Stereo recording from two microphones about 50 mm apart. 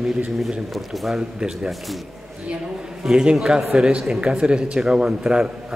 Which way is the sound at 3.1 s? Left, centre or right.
Centre.